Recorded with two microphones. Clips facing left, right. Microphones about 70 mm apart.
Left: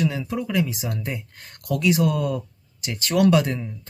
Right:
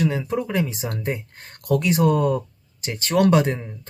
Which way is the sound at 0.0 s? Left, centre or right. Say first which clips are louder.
Right 2 dB; right.